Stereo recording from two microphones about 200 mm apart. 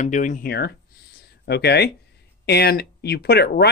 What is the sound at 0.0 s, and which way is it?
Speech, 40° left (ahead or behind).